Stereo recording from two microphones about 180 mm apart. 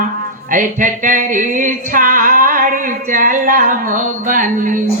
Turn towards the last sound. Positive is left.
turn(degrees=-45)  # may be behind; listen again after turning